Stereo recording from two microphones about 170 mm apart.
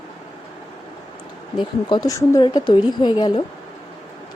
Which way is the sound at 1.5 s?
25° left (ahead or behind).